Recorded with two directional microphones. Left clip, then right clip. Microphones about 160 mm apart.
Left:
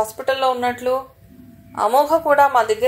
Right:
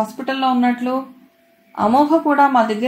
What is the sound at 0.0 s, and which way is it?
Speech, 40° left (ahead or behind).